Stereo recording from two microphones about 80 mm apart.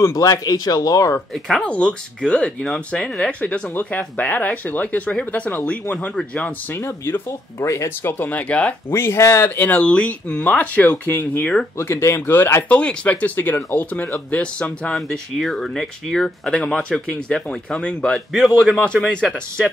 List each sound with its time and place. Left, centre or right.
0.0 s speech: left
1.6 s speech: centre
7.2 s speech: left
8.0 s speech: left
8.9 s speech: left
9.6 s speech: left
11.8 s speech: left
12.6 s speech: centre
15.0 s speech: centre